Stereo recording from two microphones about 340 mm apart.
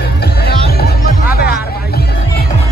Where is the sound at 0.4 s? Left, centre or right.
Left.